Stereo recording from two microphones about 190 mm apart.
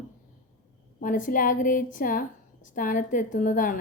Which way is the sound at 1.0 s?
45° left (ahead or behind).